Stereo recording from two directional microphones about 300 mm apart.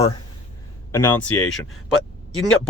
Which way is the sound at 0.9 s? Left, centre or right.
Centre.